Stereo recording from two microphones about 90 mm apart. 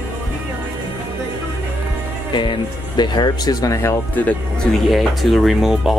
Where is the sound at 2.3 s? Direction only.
60° left (ahead or behind); by 3.9 s 40° left (ahead or behind).